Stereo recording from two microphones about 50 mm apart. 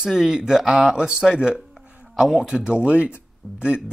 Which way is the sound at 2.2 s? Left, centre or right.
Centre.